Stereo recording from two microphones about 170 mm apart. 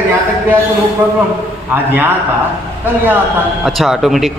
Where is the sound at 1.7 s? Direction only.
10° right (ahead or behind).